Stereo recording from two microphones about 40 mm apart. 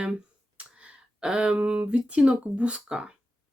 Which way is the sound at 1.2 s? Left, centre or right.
Right.